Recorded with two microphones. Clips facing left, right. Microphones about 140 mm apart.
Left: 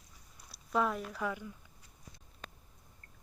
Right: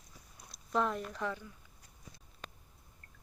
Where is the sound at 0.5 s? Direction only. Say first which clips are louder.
Left 1 dB; 5° left (ahead or behind).